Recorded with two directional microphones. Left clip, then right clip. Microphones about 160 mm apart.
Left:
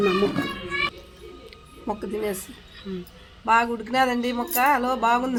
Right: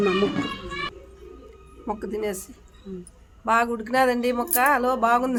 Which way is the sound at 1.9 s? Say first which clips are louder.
Left 1 dB; 25° left (ahead or behind).